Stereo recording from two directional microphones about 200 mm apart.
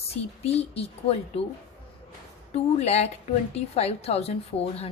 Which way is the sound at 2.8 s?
30° left (ahead or behind).